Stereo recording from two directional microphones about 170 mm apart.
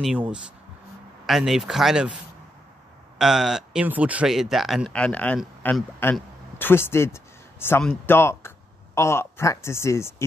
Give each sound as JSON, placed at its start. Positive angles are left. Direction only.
{"t": 1.2, "sound": "speech", "side_deg": 0}
{"t": 3.2, "sound": "speech", "side_deg": 0}